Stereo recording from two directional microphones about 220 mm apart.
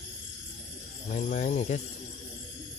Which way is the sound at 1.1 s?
35° left (ahead or behind).